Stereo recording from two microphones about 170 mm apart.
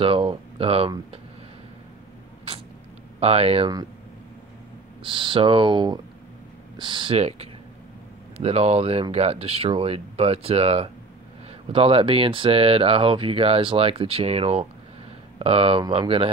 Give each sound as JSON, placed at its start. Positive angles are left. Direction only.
{"t": 0.0, "sound": "speech", "side_deg": -30}
{"t": 3.2, "sound": "speech", "side_deg": -35}
{"t": 5.0, "sound": "speech", "side_deg": -30}